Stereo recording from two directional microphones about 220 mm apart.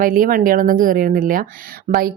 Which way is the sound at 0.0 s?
40° right (ahead or behind).